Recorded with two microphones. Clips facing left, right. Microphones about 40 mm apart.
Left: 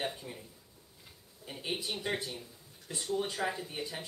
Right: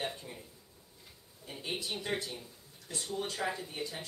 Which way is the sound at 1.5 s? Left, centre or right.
Centre.